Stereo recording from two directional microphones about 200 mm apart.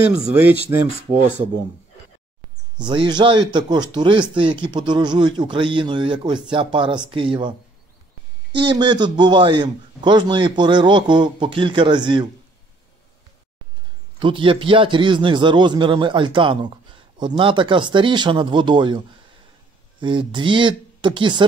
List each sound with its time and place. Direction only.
0.1 s speech: 10° right (ahead or behind)
2.8 s a man's voice: 25° right (ahead or behind)
8.5 s a man's voice: 25° right (ahead or behind)
14.2 s a man's voice: 25° right (ahead or behind)